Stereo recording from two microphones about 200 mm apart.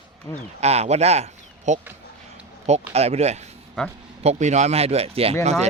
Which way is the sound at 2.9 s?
30° right (ahead or behind).